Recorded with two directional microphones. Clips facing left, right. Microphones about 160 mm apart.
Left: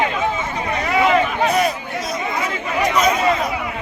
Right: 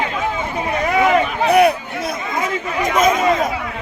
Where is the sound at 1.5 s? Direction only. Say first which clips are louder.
Right 6 dB; 60° right (ahead or behind).